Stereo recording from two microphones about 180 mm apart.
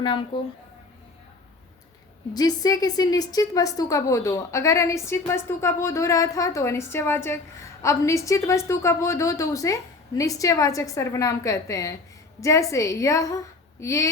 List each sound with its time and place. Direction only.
2.3 s a woman's voice: 20° left (ahead or behind)